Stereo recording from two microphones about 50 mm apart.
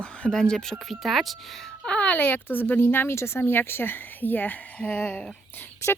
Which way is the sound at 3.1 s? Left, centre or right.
Left.